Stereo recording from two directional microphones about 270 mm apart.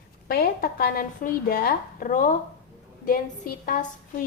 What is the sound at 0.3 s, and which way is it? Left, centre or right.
Speech, left.